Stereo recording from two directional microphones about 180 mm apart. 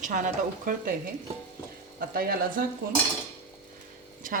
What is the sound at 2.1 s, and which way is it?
Speech, 55° right (ahead or behind).